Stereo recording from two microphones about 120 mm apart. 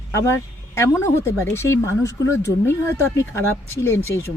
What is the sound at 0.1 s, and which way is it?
Speech, 25° left (ahead or behind).